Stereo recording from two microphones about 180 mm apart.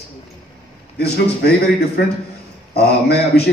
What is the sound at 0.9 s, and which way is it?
Speech, 60° left (ahead or behind).